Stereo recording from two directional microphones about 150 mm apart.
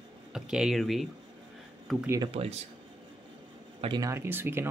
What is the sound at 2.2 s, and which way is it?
Speech, 40° right (ahead or behind).